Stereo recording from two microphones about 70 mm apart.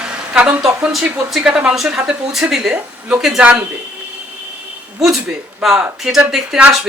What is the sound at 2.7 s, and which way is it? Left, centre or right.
Speech, right.